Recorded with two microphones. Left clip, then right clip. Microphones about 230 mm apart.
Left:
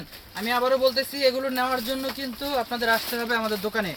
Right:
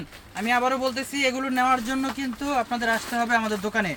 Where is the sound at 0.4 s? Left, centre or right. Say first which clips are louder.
Left 1 dB; centre.